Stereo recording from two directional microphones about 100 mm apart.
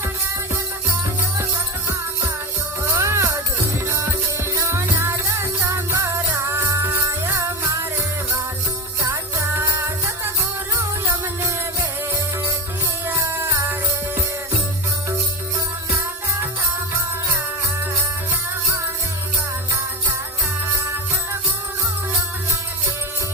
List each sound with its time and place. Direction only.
2.9 s music: 30° right (ahead or behind)
11.4 s music: 30° right (ahead or behind)